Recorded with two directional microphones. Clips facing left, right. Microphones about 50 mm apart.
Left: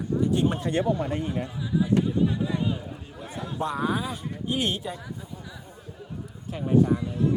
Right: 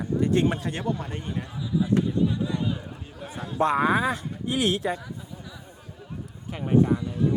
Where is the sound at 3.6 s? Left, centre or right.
Right.